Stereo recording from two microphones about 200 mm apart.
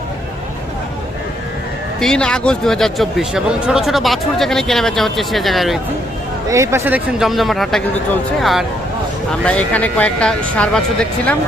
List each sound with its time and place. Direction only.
2.0 s speech: 5° left (ahead or behind)
6.5 s speech: 15° right (ahead or behind); by 11.3 s 5° left (ahead or behind)